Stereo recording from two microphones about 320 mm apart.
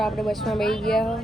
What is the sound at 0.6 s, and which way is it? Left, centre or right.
Speech, centre.